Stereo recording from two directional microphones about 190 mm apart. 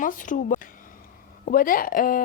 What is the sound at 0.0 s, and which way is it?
Speech, 45° left (ahead or behind).